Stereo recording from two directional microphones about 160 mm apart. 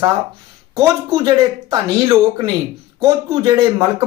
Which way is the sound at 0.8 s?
20° right (ahead or behind).